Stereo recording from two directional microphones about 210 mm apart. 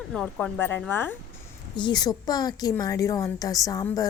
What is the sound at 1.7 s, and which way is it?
A woman's voice, 20° left (ahead or behind).